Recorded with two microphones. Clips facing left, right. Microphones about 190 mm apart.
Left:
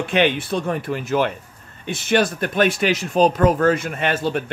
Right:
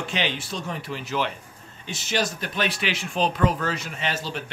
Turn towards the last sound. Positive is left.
turn(degrees=55)  # may be behind; listen again after turning